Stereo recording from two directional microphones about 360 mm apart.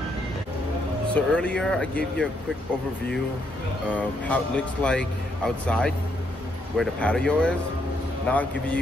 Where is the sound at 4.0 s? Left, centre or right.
Centre.